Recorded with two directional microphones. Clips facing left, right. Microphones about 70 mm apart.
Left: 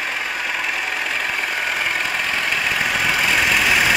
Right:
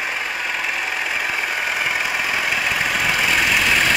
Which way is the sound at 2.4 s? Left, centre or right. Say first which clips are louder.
Even; centre.